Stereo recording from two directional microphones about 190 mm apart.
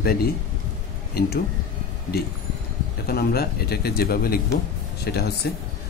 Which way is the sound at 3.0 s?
55° left (ahead or behind).